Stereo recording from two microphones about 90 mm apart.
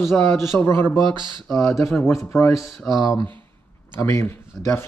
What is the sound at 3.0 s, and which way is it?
A man's voice, 35° left (ahead or behind).